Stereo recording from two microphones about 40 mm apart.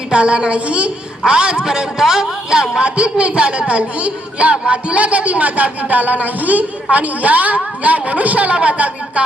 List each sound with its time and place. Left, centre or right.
0.1 s a man's voice: right